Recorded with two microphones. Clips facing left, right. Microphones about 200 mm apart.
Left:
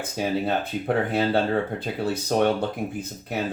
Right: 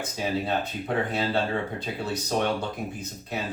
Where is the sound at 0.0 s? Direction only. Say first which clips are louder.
Left 3 dB; 55° left (ahead or behind).